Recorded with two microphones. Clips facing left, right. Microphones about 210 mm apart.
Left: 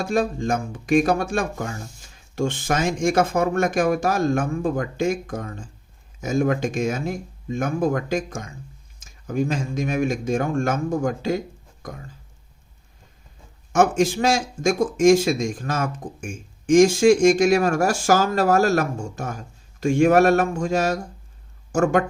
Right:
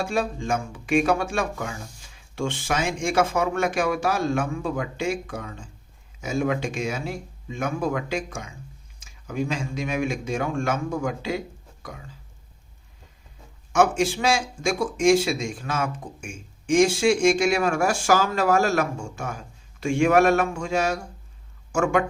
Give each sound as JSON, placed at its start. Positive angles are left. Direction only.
{"t": 0.0, "sound": "speech", "side_deg": 40}
{"t": 14.0, "sound": "speech", "side_deg": 40}